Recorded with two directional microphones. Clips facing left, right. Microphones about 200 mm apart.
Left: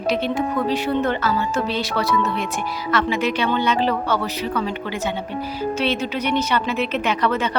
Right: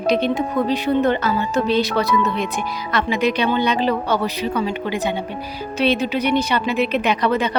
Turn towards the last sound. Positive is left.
turn(degrees=-15)  # may be behind; listen again after turning